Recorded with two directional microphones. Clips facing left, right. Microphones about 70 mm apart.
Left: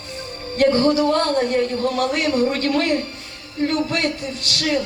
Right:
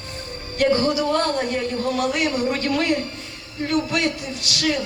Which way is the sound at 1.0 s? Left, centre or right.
Left.